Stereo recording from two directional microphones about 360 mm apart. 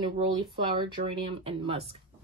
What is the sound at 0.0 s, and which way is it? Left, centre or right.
Speech, centre.